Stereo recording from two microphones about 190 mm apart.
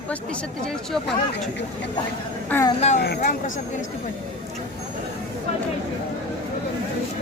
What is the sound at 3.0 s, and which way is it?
Speech, 55° left (ahead or behind).